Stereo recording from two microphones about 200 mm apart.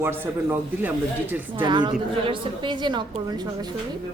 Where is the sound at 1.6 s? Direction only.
25° right (ahead or behind).